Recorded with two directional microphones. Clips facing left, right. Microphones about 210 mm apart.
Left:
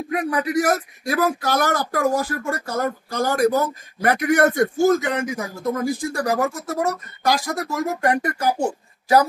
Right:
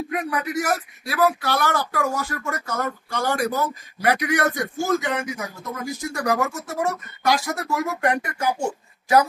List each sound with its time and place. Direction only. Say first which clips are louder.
0.1 s speech: left 7 dB; 40° left (ahead or behind)